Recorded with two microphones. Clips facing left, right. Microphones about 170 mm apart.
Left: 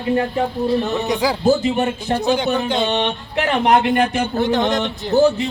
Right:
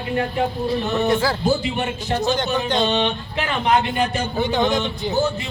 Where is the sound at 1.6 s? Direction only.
45° left (ahead or behind).